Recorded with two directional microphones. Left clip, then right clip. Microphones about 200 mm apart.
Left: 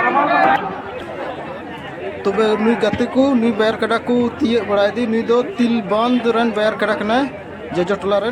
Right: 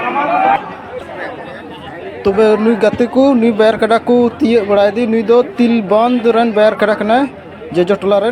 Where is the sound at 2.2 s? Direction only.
15° right (ahead or behind).